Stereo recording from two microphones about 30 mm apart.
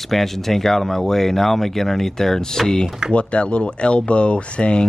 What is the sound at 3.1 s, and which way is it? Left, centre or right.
Speech, left.